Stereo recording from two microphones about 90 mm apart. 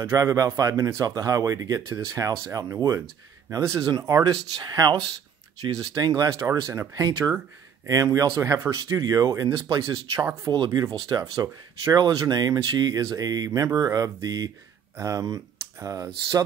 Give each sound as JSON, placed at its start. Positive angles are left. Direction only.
{"t": 0.0, "sound": "speech", "side_deg": -40}
{"t": 3.5, "sound": "speech", "side_deg": -40}
{"t": 10.5, "sound": "speech", "side_deg": -50}